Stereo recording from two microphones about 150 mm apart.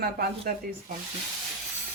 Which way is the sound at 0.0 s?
85° right.